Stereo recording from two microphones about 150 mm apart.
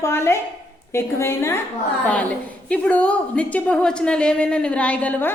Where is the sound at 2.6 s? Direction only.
10° left (ahead or behind).